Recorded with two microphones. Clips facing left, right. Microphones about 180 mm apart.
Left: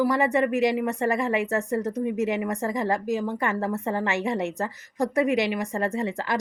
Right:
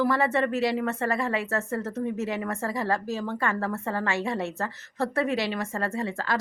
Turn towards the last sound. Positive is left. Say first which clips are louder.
# left 2 dB
turn(degrees=20)  # may be behind; listen again after turning